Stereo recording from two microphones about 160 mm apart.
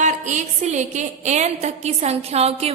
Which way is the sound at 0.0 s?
50° right (ahead or behind).